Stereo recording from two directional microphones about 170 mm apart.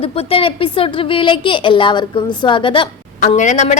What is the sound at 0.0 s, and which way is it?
A woman's voice, 35° left (ahead or behind).